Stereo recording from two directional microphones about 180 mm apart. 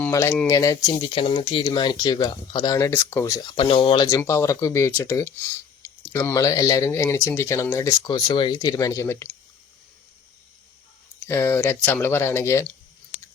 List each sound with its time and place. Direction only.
0.0 s speech: 15° left (ahead or behind)
11.3 s speech: 15° left (ahead or behind)